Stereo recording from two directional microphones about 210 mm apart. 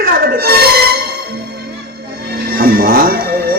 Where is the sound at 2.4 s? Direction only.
45° right (ahead or behind).